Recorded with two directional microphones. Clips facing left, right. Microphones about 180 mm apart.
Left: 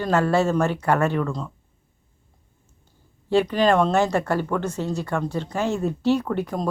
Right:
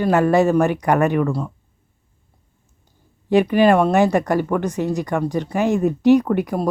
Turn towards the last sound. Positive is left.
turn(degrees=-10)  # may be behind; listen again after turning